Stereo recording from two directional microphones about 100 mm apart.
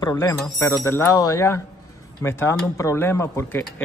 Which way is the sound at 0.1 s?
30° left (ahead or behind).